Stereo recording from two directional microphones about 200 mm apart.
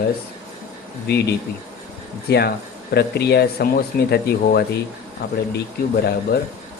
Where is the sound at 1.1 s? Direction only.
55° left (ahead or behind).